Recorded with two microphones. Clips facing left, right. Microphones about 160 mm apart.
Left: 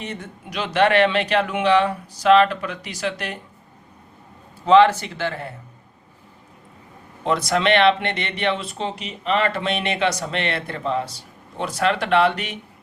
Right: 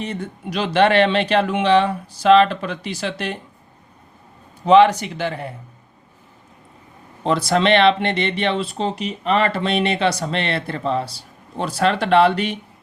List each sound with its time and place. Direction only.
0.0 s speech: 35° right (ahead or behind)
4.6 s speech: 15° right (ahead or behind)
7.3 s speech: 30° right (ahead or behind)